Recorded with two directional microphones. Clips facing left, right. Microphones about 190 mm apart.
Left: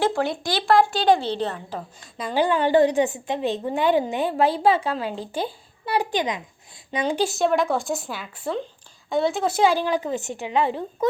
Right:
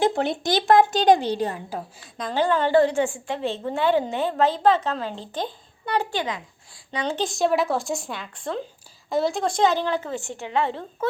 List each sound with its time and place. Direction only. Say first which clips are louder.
0.0 s a woman's voice: right 1 dB; 20° right (ahead or behind)
2.1 s a woman's voice: left 1 dB; 10° left (ahead or behind)